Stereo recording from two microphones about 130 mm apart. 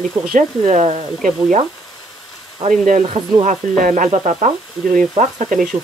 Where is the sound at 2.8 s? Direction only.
85° right.